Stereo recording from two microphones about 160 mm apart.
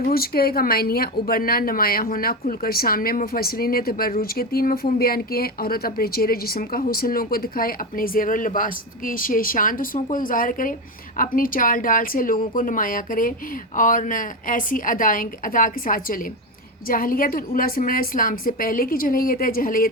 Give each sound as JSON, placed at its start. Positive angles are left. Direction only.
{"t": 0.1, "sound": "a woman's voice", "side_deg": 70}